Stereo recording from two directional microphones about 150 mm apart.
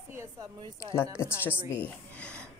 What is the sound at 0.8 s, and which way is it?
Speech, 15° left (ahead or behind).